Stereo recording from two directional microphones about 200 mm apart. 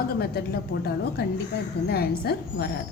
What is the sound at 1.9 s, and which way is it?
Speech, 50° left (ahead or behind).